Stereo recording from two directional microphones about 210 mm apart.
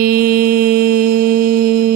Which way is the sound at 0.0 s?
45° right (ahead or behind).